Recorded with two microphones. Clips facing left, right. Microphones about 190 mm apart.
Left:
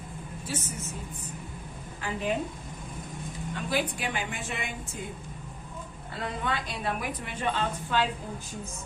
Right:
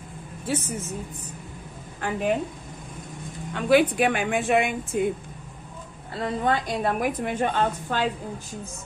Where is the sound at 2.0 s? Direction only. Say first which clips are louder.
Right 6 dB; 55° right (ahead or behind).